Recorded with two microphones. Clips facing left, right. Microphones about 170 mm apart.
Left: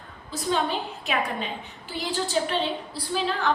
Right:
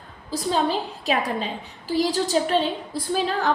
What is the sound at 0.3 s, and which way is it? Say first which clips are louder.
A woman's voice: right 3 dB; 35° right (ahead or behind).